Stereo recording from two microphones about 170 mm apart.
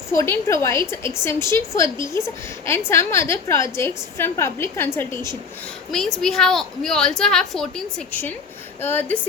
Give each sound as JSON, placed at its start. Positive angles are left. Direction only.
{"t": 0.2, "sound": "a woman's voice", "side_deg": 15}
{"t": 5.9, "sound": "a woman's voice", "side_deg": 0}